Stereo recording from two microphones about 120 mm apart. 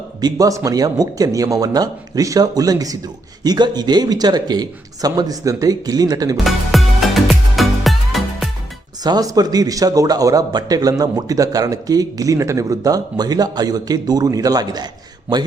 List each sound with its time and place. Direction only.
0.2 s a man's voice: 30° right (ahead or behind)
6.3 s music: centre (ahead or behind)
9.0 s a man's voice: 35° right (ahead or behind)